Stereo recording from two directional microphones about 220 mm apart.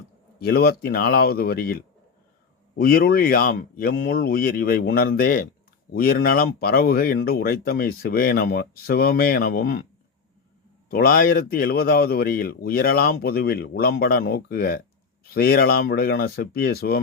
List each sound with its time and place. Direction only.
0.3 s speech: 45° left (ahead or behind)
10.8 s speech: 45° left (ahead or behind)